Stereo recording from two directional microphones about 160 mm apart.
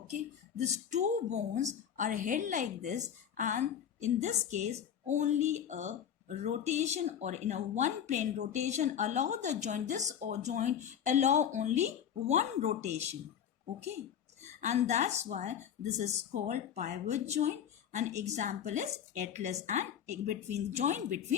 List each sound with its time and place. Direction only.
0.1 s speech: 45° right (ahead or behind)
14.4 s speech: 45° right (ahead or behind)